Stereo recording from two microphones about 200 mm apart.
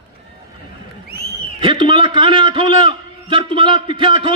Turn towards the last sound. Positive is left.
turn(degrees=-25)  # may be behind; listen again after turning